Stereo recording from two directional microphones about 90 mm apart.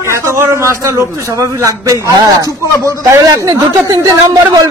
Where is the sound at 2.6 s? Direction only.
35° left (ahead or behind).